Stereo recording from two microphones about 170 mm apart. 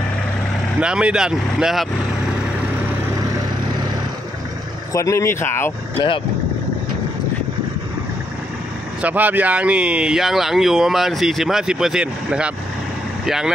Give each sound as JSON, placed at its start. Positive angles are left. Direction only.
{"t": 0.7, "sound": "speech", "side_deg": -5}
{"t": 4.9, "sound": "speech", "side_deg": 15}
{"t": 9.0, "sound": "speech", "side_deg": -10}